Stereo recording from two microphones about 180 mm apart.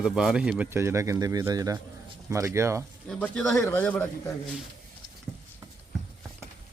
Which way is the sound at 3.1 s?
5° left (ahead or behind).